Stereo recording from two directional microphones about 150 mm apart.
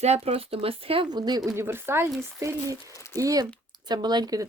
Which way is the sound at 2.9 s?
20° left (ahead or behind).